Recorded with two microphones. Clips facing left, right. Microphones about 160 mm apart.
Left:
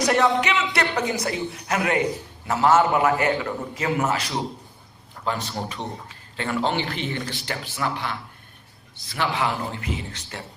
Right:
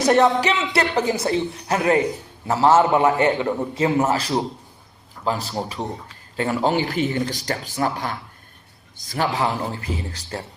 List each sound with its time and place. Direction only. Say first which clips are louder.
0.0 s a man's voice: right 4 dB; 30° right (ahead or behind)